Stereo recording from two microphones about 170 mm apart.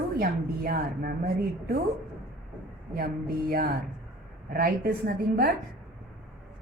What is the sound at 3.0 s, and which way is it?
A woman's voice, 65° right (ahead or behind).